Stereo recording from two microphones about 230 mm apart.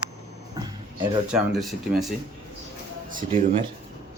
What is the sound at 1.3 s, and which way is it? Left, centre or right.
Speech, centre.